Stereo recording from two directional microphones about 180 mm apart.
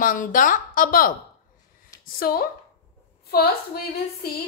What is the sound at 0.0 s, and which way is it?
A woman's voice, 50° left (ahead or behind).